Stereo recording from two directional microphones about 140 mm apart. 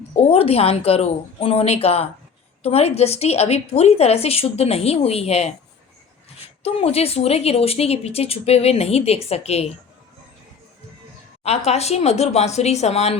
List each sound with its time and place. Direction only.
0.2 s speech: 45° left (ahead or behind)
6.6 s speech: 45° left (ahead or behind)
11.4 s speech: 50° left (ahead or behind)